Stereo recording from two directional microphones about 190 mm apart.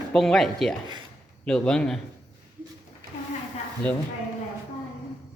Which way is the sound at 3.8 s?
5° left (ahead or behind).